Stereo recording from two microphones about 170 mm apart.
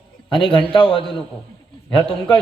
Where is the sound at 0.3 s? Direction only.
30° left (ahead or behind).